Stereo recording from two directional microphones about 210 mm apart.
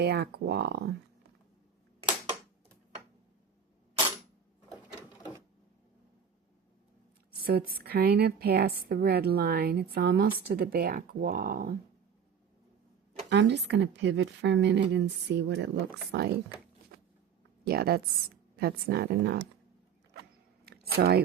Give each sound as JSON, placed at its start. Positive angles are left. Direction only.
{"t": 0.0, "sound": "a woman's voice", "side_deg": -50}
{"t": 7.4, "sound": "a woman's voice", "side_deg": -45}
{"t": 13.3, "sound": "a woman's voice", "side_deg": -55}
{"t": 16.9, "sound": "vehicle", "side_deg": -45}
{"t": 17.7, "sound": "a woman's voice", "side_deg": -50}
{"t": 20.1, "sound": "mechanisms", "side_deg": -50}
{"t": 20.7, "sound": "a sound", "side_deg": -50}